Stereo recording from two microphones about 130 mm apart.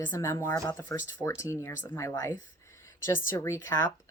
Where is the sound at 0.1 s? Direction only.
20° left (ahead or behind).